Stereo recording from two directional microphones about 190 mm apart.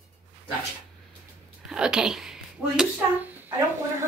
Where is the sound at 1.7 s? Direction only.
5° right (ahead or behind).